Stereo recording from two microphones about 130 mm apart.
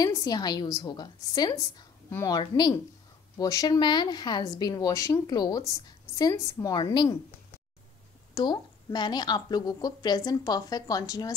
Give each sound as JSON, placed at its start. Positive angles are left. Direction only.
{"t": 0.0, "sound": "a woman's voice", "side_deg": 30}
{"t": 8.4, "sound": "a woman's voice", "side_deg": 35}